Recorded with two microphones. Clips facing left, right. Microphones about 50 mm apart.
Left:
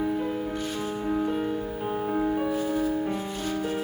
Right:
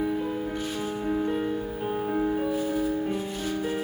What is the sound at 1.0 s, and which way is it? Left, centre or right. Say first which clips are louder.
Music: even; centre.